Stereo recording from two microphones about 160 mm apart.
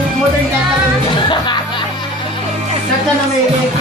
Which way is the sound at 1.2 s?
30° left (ahead or behind).